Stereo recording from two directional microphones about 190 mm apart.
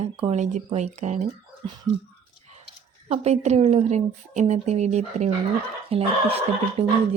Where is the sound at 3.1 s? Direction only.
35° right (ahead or behind).